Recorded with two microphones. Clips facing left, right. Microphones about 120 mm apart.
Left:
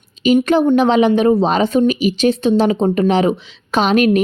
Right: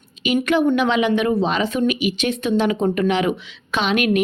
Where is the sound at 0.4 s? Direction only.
30° left (ahead or behind).